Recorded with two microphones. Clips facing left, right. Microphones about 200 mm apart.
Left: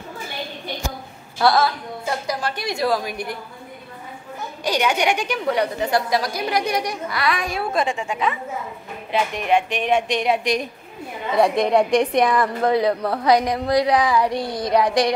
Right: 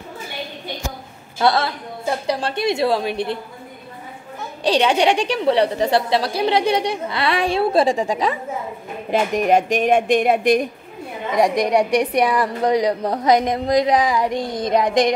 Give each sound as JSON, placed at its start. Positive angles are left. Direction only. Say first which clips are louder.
{"t": 1.4, "sound": "a woman's voice", "louder": "even", "side_deg": -20}
{"t": 4.6, "sound": "a woman's voice", "louder": "right 4 dB", "side_deg": -30}
{"t": 11.3, "sound": "a woman's voice", "louder": "even", "side_deg": -15}